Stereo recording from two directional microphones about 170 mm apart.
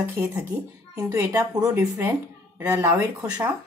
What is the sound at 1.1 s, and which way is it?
A woman's voice, 15° right (ahead or behind).